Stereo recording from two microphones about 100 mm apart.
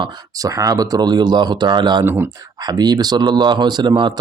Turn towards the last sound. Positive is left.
turn(degrees=-50)  # may be behind; listen again after turning